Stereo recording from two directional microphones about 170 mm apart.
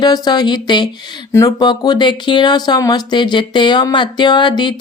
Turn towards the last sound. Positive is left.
turn(degrees=25)  # may be behind; listen again after turning